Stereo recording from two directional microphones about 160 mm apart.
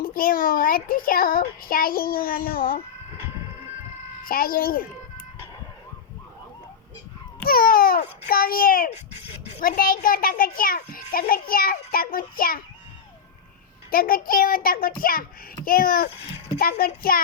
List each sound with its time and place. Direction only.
0.0 s a child's voice: 65° left (ahead or behind)
4.2 s a child's voice: 65° left (ahead or behind)
7.4 s a child's voice: 65° left (ahead or behind)
13.9 s a child's voice: 65° left (ahead or behind)